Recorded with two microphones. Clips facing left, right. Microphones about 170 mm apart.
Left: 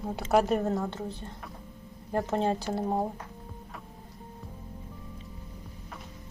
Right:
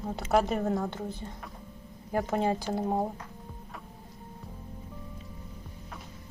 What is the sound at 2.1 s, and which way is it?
A woman's voice, 5° right (ahead or behind).